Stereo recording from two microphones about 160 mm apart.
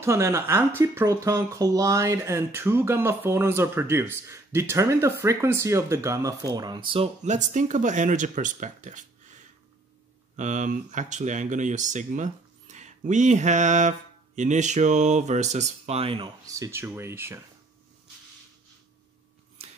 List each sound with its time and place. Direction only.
0.0 s speech: 15° right (ahead or behind); by 7.1 s 30° right (ahead or behind)
7.2 s speech: 50° right (ahead or behind)
10.3 s speech: 50° right (ahead or behind)
16.4 s speech: 20° right (ahead or behind)